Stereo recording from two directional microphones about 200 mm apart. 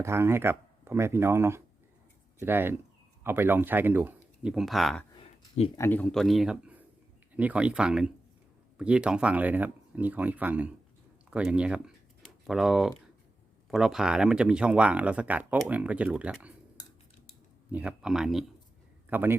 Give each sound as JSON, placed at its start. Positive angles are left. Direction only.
{"t": 0.0, "sound": "speech", "side_deg": -15}
{"t": 5.2, "sound": "a sound", "side_deg": 30}
{"t": 5.7, "sound": "speech", "side_deg": 10}
{"t": 17.7, "sound": "speech", "side_deg": -5}